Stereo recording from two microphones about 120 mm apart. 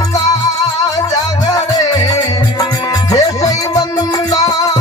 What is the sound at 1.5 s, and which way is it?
Music, 30° left (ahead or behind).